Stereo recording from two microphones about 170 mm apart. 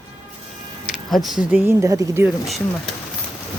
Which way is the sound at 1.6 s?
15° right (ahead or behind).